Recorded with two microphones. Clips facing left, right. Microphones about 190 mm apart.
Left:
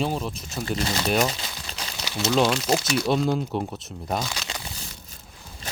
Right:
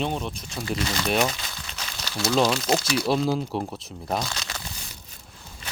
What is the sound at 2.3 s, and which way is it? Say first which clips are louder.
Speech: even; centre (ahead or behind).